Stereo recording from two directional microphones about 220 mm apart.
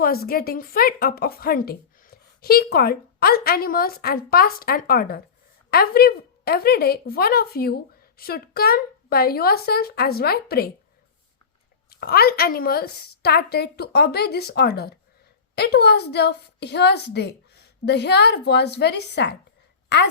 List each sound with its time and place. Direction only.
0.0 s a woman's voice: 45° left (ahead or behind)
11.9 s a woman's voice: 45° left (ahead or behind)